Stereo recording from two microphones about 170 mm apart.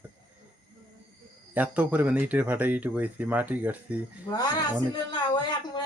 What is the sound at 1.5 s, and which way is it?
Speech, 10° right (ahead or behind).